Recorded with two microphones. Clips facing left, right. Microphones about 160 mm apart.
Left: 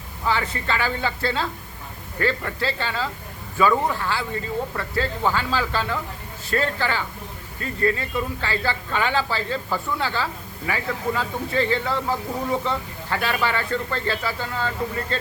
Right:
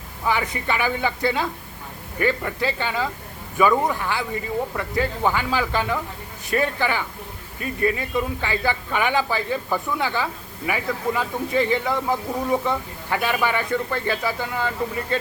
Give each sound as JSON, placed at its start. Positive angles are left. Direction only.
{"t": 0.3, "sound": "speech", "side_deg": -15}